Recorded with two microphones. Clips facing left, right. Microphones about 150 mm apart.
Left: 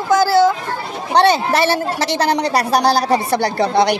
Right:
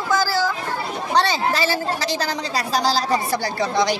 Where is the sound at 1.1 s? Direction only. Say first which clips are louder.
Left 7 dB; 65° left (ahead or behind).